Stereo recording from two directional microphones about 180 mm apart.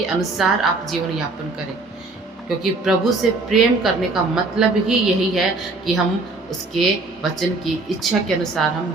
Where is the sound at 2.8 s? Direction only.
Centre (ahead or behind).